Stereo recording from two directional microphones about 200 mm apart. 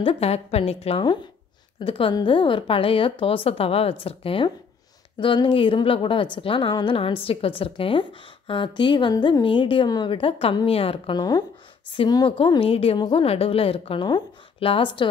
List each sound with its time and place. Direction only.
0.0 s a woman's voice: 30° left (ahead or behind)